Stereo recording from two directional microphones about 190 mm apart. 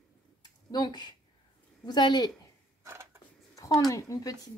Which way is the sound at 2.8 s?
15° right (ahead or behind).